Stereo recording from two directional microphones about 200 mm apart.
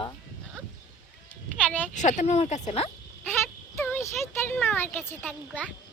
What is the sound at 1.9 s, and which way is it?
Speech, 35° left (ahead or behind).